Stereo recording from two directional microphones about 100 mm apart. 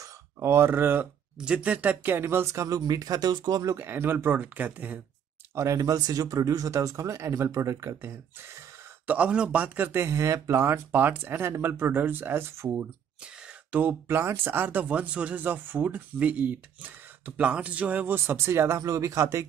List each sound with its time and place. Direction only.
0.0 s a sound: 30° right (ahead or behind)
1.4 s speech: 10° right (ahead or behind); by 3.7 s 45° right (ahead or behind)
3.7 s speech: 25° right (ahead or behind)
5.5 s speech: 30° right (ahead or behind)